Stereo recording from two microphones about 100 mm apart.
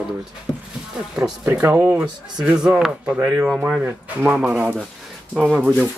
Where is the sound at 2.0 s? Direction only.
10° right (ahead or behind).